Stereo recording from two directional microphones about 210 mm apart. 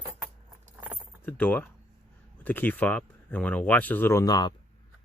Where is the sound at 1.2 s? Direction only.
5° left (ahead or behind).